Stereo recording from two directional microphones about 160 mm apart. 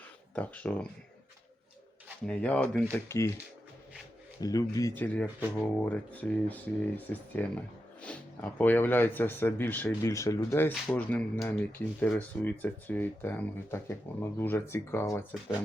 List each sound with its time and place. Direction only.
0.3 s speech: 10° left (ahead or behind)
2.2 s speech: 5° left (ahead or behind)
4.4 s speech: 20° left (ahead or behind)
10.8 s speech: 5° left (ahead or behind)